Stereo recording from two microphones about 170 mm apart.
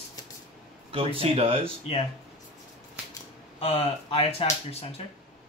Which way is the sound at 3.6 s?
35° left (ahead or behind).